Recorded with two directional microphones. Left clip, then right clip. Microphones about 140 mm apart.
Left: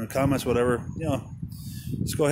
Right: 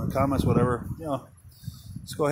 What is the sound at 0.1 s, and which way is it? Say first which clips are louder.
Speech: left 1 dB; 90° left.